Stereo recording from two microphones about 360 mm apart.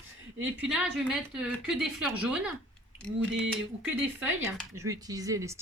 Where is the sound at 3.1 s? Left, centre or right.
Right.